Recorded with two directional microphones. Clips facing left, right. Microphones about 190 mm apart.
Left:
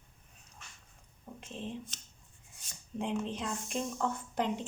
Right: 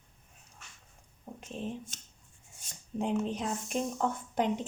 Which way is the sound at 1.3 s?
40° right (ahead or behind).